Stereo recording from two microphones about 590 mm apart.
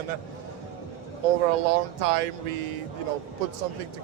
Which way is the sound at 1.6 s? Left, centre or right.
Right.